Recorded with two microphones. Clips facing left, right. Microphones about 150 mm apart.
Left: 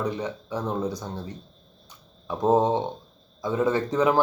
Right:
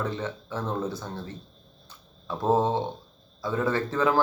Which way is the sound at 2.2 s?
15° left (ahead or behind).